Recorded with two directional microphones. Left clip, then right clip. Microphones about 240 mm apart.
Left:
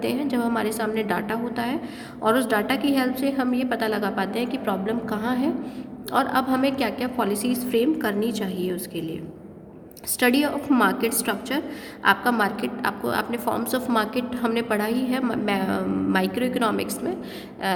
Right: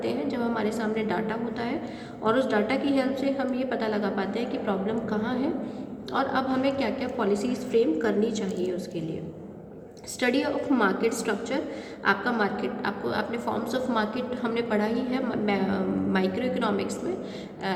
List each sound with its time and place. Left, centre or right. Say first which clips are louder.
0.0 s a woman's voice: left 3 dB; left
10.2 s a woman's voice: left 4 dB; left
17.7 s a sound: left 5 dB; left